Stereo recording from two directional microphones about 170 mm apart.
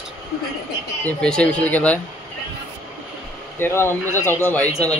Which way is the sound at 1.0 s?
5° left (ahead or behind).